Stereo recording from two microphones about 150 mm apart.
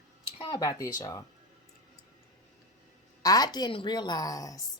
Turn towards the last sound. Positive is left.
turn(degrees=20)  # may be behind; listen again after turning